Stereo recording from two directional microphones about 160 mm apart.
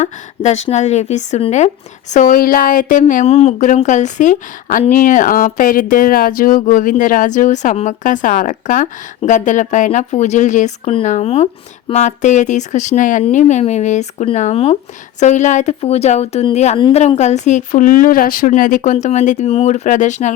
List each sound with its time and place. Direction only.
0.0 s a woman's voice: 45° left (ahead or behind)
18.8 s a woman's voice: 45° left (ahead or behind)